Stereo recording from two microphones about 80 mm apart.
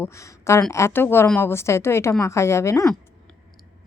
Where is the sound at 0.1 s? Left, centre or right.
Left.